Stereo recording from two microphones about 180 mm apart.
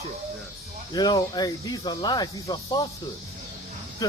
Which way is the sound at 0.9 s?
20° left (ahead or behind).